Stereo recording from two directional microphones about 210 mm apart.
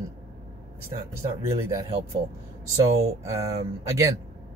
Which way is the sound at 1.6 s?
15° right (ahead or behind).